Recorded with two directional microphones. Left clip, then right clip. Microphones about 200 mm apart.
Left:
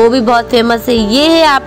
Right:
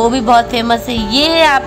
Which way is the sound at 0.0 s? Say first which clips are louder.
Left 1 dB; 15° left (ahead or behind).